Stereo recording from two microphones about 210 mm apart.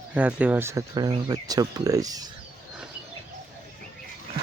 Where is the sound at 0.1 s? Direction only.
5° right (ahead or behind).